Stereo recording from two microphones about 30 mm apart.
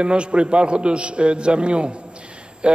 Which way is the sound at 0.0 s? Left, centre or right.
Right.